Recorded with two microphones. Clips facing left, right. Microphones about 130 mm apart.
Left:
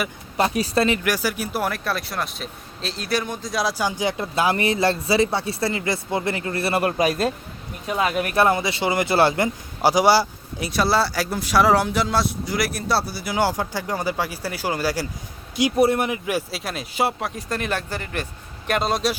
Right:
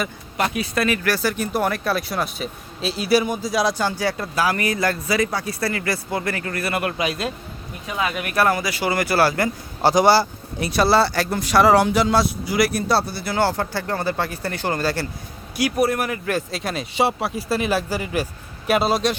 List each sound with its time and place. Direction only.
0.3 s speech: 35° left (ahead or behind); by 3.8 s centre (ahead or behind)
3.8 s speech: 20° left (ahead or behind); by 8.4 s 35° left (ahead or behind)
8.4 s speech: 25° left (ahead or behind)
9.9 s speech: 10° left (ahead or behind)
15.8 s speech: 25° left (ahead or behind); by 19.1 s 5° right (ahead or behind)